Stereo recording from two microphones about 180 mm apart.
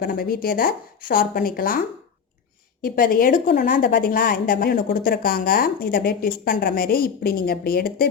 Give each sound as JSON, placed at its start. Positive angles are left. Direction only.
{"t": 0.0, "sound": "a woman's voice", "side_deg": 55}
{"t": 2.8, "sound": "a woman's voice", "side_deg": 55}